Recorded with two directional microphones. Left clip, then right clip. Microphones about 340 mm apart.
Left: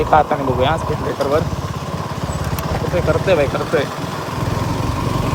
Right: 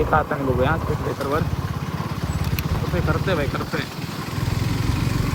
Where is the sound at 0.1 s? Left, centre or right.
Centre.